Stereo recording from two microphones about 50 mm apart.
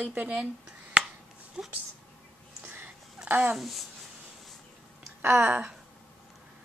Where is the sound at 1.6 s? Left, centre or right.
Centre.